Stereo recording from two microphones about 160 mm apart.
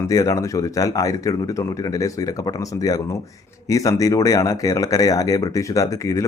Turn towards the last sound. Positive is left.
turn(degrees=20)  # may be behind; listen again after turning